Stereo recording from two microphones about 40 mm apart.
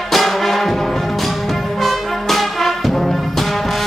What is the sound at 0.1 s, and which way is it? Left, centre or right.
Brass instrument, centre.